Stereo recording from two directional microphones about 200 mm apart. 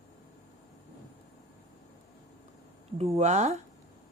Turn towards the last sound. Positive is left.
turn(degrees=-35)  # may be behind; listen again after turning